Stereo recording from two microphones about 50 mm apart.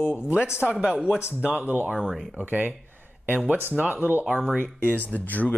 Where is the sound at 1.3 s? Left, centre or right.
Right.